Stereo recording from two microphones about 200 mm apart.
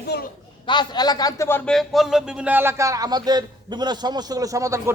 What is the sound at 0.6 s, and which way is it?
Speech, 20° left (ahead or behind).